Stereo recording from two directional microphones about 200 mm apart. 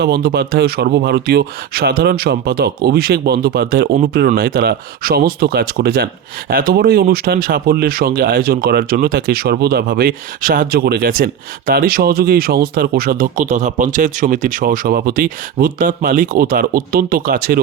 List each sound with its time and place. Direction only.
0.0 s speech: 50° right (ahead or behind)